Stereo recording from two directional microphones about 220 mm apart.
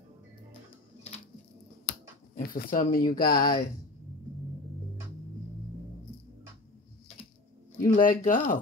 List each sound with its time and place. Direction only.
2.3 s speech: 40° left (ahead or behind)
7.8 s speech: 40° left (ahead or behind)